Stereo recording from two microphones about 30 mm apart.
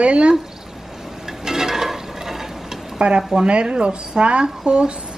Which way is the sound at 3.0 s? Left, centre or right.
Right.